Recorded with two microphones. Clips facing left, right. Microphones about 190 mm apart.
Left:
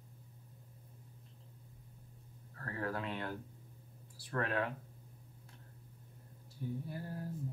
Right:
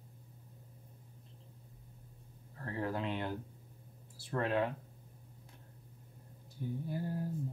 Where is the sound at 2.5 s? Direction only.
20° right (ahead or behind).